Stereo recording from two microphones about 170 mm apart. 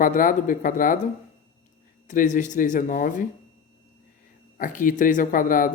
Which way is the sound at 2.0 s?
50° left (ahead or behind).